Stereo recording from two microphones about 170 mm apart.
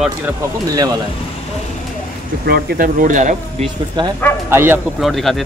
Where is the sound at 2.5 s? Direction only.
60° right (ahead or behind); by 3.7 s 45° right (ahead or behind).